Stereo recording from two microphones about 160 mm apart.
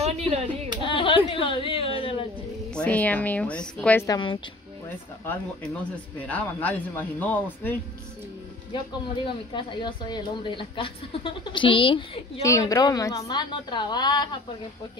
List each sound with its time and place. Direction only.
0.0 s speech: 40° right (ahead or behind)
0.8 s speech: 30° left (ahead or behind)
2.7 s speech: 10° left (ahead or behind)
4.1 s a woman's voice: 30° left (ahead or behind)
4.8 s speech: 15° left (ahead or behind)
9.2 s a woman's voice: 30° left (ahead or behind)
12.4 s a woman's voice: 20° left (ahead or behind)